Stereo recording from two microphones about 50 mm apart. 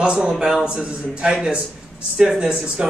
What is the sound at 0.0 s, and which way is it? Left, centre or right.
A man's voice, centre.